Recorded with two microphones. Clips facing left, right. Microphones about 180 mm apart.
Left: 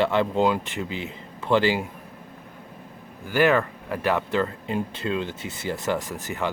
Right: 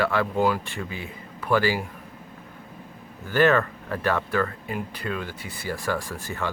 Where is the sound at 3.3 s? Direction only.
10° left (ahead or behind).